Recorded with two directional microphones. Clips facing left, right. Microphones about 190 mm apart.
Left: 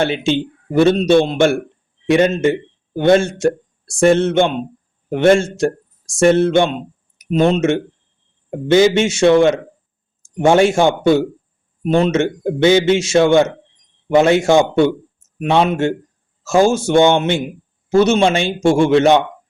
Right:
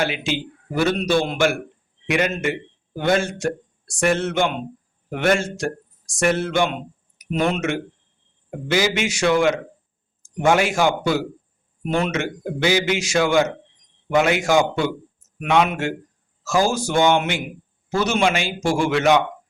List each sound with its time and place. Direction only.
0.0 s a man's voice: 25° left (ahead or behind)